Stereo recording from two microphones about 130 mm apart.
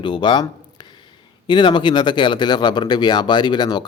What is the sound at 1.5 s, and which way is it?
Speech, 35° left (ahead or behind).